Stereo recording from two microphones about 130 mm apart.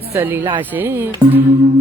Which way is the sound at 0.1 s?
15° right (ahead or behind).